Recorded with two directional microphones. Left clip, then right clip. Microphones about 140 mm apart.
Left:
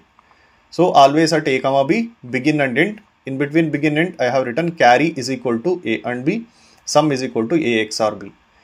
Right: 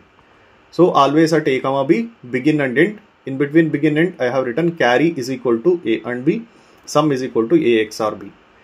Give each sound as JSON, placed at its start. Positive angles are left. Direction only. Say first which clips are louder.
{"t": 0.7, "sound": "speech", "louder": "left 1 dB", "side_deg": 20}